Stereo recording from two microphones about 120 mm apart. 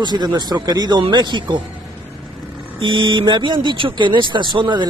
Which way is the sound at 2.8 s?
45° right (ahead or behind).